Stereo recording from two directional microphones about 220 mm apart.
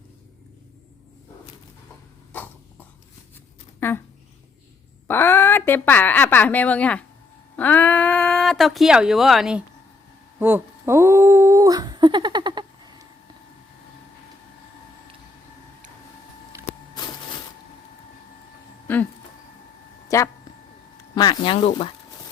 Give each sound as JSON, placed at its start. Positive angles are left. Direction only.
{"t": 2.3, "sound": "cough", "side_deg": 10}
{"t": 3.8, "sound": "speech", "side_deg": 10}
{"t": 5.0, "sound": "a woman's voice", "side_deg": 10}
{"t": 10.4, "sound": "humming", "side_deg": -10}
{"t": 16.5, "sound": "vehicle", "side_deg": -15}
{"t": 18.9, "sound": "a sound", "side_deg": 10}
{"t": 20.1, "sound": "speech", "side_deg": 15}